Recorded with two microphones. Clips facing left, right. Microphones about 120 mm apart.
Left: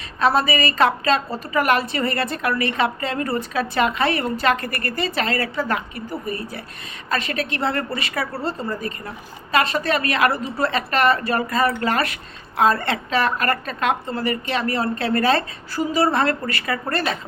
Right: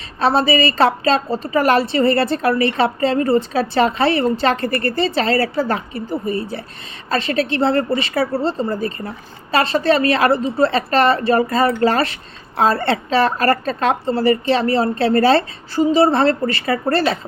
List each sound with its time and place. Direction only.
0.2 s a woman's voice: 30° right (ahead or behind)